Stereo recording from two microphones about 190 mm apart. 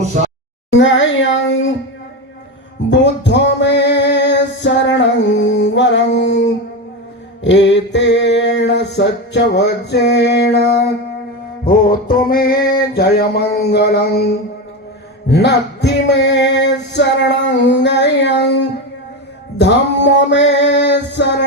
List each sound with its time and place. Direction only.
0.7 s speech: 80° left
2.9 s music: 65° left (ahead or behind)
7.4 s mantra: 65° left (ahead or behind)
11.7 s music: 50° left (ahead or behind)